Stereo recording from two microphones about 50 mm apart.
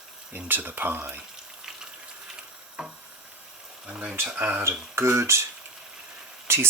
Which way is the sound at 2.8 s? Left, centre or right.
Centre.